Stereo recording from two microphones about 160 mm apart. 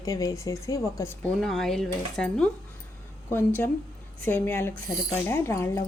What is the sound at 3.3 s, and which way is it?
Speech, 15° left (ahead or behind).